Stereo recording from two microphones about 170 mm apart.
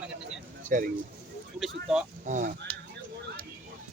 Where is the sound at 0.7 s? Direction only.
55° right (ahead or behind).